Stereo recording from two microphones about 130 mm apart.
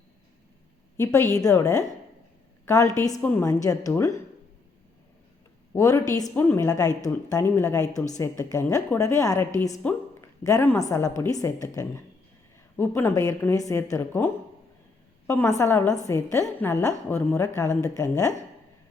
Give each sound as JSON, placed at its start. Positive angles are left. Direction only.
{"t": 0.9, "sound": "a woman's voice", "side_deg": 20}
{"t": 3.2, "sound": "a woman's voice", "side_deg": 10}
{"t": 3.4, "sound": "a woman's voice", "side_deg": 25}
{"t": 5.7, "sound": "a woman's voice", "side_deg": 25}
{"t": 9.8, "sound": "a sound", "side_deg": 25}
{"t": 10.8, "sound": "a woman's voice", "side_deg": 25}
{"t": 15.3, "sound": "a woman's voice", "side_deg": 20}